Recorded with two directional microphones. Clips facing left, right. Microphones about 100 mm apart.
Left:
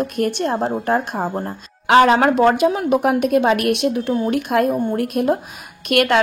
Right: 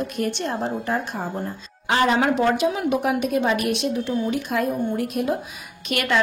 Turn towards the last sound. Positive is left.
turn(degrees=60)  # may be behind; listen again after turning